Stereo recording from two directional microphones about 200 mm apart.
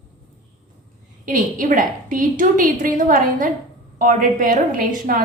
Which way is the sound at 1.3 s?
40° right (ahead or behind).